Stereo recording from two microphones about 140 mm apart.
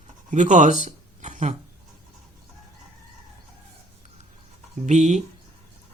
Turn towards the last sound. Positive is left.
turn(degrees=-55)  # may be behind; listen again after turning